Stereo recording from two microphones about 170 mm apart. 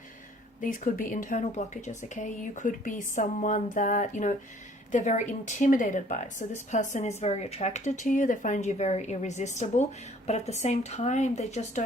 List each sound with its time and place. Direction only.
0.6 s speech: 55° left (ahead or behind)